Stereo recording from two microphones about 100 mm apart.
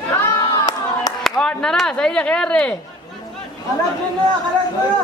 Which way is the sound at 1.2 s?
5° left (ahead or behind).